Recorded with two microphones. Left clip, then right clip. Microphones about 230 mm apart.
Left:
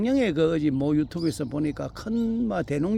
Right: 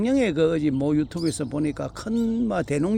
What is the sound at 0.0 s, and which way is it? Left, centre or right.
Speech, centre.